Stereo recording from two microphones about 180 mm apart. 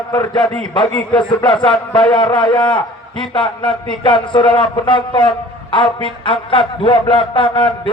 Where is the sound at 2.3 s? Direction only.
25° left (ahead or behind).